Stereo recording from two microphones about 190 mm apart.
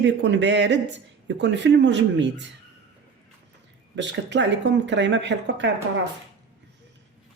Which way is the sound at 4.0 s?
70° right (ahead or behind).